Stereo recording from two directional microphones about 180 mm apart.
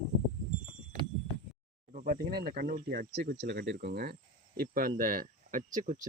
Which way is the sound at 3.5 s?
65° right (ahead or behind).